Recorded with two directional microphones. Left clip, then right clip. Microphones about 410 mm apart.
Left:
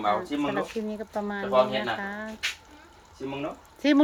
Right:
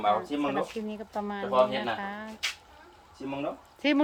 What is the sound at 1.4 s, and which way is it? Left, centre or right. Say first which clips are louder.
Speech: left 2 dB; right.